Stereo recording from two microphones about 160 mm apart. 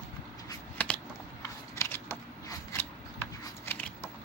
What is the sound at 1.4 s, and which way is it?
Scissors, 20° left (ahead or behind).